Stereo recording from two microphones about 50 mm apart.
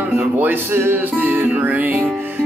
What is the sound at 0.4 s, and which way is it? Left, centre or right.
Music, right.